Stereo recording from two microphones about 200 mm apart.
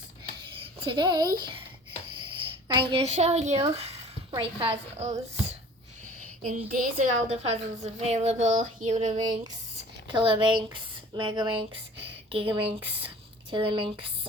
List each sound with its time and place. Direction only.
0.8 s a woman's voice: 25° right (ahead or behind)
2.6 s a woman's voice: 25° right (ahead or behind)
6.4 s a woman's voice: 40° right (ahead or behind)
9.1 s a woman's voice: 20° right (ahead or behind)